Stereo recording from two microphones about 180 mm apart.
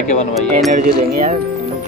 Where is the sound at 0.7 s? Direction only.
45° right (ahead or behind).